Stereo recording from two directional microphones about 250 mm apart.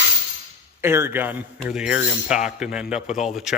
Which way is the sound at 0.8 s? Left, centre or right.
Centre.